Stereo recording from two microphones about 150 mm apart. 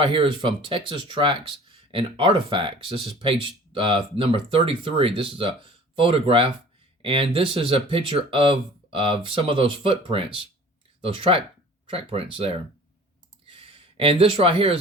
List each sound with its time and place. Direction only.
0.0 s speech: 35° right (ahead or behind)